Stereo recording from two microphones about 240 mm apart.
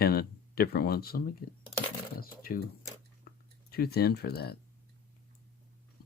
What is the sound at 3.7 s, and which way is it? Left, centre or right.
Speech, left.